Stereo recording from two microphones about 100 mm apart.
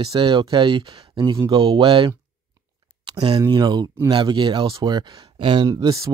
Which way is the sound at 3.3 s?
45° right (ahead or behind).